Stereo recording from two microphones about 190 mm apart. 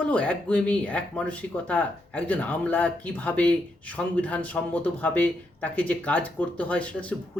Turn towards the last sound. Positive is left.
turn(degrees=5)  # may be behind; listen again after turning